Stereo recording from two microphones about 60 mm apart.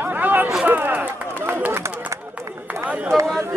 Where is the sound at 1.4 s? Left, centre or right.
Right.